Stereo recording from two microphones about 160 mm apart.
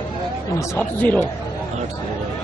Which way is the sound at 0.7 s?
10° left (ahead or behind).